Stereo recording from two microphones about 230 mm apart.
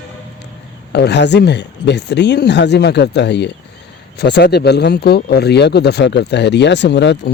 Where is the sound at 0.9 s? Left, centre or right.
Left.